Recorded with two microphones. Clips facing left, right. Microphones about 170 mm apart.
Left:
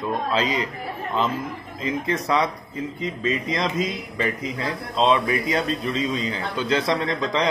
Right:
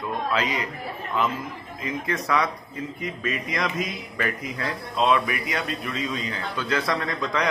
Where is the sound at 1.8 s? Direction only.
30° left (ahead or behind).